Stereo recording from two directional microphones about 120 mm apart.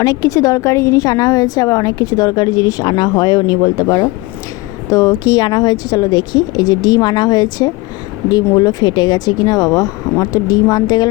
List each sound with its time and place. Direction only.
0.0 s a woman's voice: 30° left (ahead or behind)